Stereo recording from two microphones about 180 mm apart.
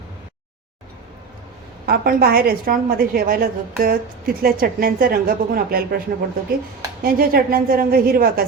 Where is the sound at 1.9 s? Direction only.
55° right (ahead or behind).